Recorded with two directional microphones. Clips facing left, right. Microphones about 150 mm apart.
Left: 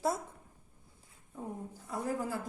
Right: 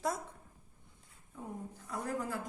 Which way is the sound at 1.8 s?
15° left (ahead or behind).